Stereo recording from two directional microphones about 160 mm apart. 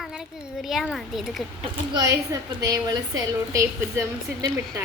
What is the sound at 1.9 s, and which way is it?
A woman's voice, 20° right (ahead or behind).